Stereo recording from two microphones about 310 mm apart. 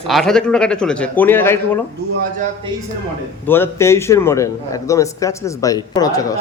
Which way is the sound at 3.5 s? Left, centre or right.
Centre.